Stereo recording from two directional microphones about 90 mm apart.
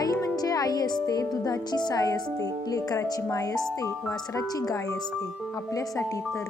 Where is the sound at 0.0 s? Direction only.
45° left (ahead or behind).